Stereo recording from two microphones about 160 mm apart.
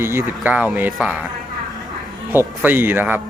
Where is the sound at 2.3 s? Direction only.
15° right (ahead or behind).